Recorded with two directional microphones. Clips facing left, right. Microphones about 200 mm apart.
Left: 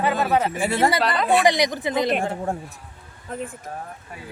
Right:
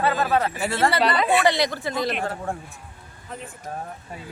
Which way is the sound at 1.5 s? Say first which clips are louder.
Left 2 dB; 15° left (ahead or behind).